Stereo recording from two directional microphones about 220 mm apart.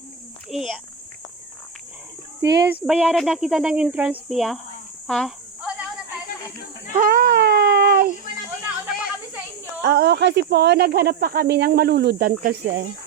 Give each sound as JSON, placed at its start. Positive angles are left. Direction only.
{"t": 0.5, "sound": "speech", "side_deg": 0}
{"t": 2.4, "sound": "speech", "side_deg": -10}
{"t": 5.0, "sound": "insect", "side_deg": 0}
{"t": 6.9, "sound": "a sound", "side_deg": -40}
{"t": 9.8, "sound": "speech", "side_deg": -50}